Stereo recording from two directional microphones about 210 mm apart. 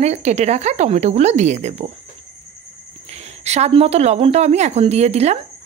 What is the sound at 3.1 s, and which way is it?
Speech, 30° right (ahead or behind).